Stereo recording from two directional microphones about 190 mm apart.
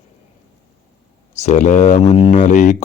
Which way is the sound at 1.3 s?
35° left (ahead or behind).